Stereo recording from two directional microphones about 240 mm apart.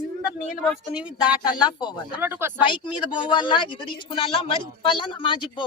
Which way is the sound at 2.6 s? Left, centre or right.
Centre.